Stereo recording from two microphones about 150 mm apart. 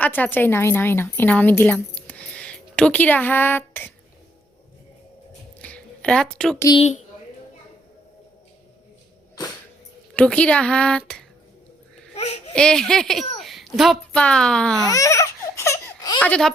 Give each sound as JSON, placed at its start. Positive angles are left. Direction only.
{"t": 0.0, "sound": "a woman's voice", "side_deg": 10}
{"t": 5.6, "sound": "a sound", "side_deg": 5}
{"t": 6.7, "sound": "speech", "side_deg": 50}
{"t": 10.2, "sound": "speech", "side_deg": 10}
{"t": 12.1, "sound": "babbling", "side_deg": 45}
{"t": 12.5, "sound": "a child's voice", "side_deg": 5}
{"t": 14.8, "sound": "baby cry", "side_deg": 20}
{"t": 16.1, "sound": "speech", "side_deg": 10}